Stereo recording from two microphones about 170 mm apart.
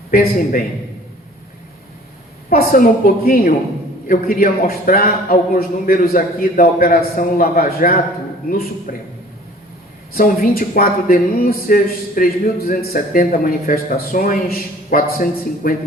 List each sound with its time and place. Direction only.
0.1 s speech: 55° left (ahead or behind)
2.5 s speech: 55° left (ahead or behind)
10.2 s speech: 60° left (ahead or behind)